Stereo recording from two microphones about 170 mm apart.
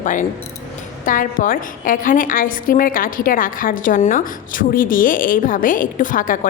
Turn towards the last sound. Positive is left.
turn(degrees=50)  # may be behind; listen again after turning